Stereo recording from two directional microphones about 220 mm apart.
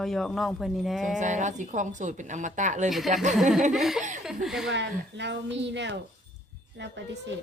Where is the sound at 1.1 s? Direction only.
35° right (ahead or behind).